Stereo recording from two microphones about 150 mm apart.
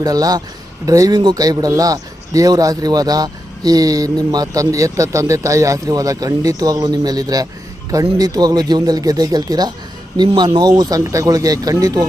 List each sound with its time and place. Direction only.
0.0 s speech: 25° right (ahead or behind)